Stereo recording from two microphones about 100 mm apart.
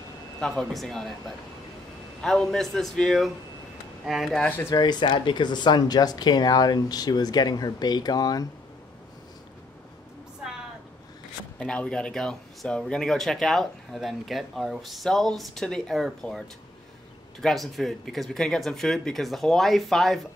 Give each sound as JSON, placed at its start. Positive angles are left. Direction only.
{"t": 0.4, "sound": "speech", "side_deg": 5}
{"t": 2.2, "sound": "speech", "side_deg": 5}
{"t": 4.6, "sound": "speech", "side_deg": 40}
{"t": 11.6, "sound": "speech", "side_deg": 10}